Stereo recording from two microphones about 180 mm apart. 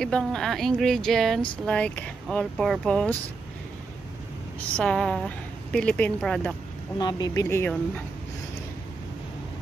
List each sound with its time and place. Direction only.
0.0 s a woman's voice: 5° left (ahead or behind)
4.7 s a woman's voice: 5° left (ahead or behind)
7.0 s speech: 20° left (ahead or behind)